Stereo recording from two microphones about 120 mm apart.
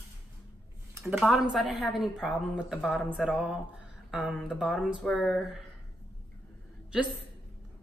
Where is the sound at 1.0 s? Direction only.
5° right (ahead or behind).